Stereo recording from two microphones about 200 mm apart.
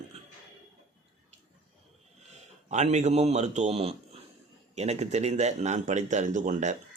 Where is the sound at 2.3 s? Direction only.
35° right (ahead or behind).